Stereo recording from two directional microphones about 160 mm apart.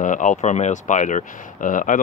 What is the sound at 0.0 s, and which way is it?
Speech, 50° left (ahead or behind).